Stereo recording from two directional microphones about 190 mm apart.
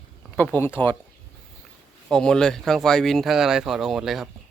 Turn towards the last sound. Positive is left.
turn(degrees=0)  # may be behind; listen again after turning